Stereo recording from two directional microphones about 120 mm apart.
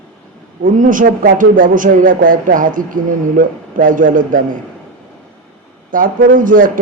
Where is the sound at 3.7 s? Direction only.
90° right.